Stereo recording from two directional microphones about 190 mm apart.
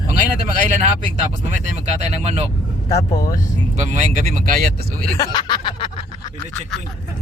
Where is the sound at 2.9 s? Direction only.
15° left (ahead or behind).